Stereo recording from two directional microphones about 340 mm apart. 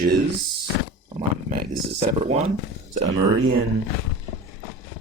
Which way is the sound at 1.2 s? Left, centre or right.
Right.